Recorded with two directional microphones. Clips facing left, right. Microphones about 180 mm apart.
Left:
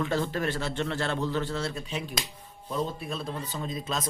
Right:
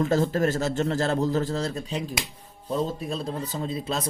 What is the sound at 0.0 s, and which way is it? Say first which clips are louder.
A man's voice: right 6 dB; 40° right (ahead or behind).